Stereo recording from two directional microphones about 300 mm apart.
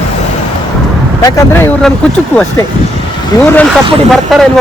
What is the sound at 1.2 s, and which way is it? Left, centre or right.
Speech, centre.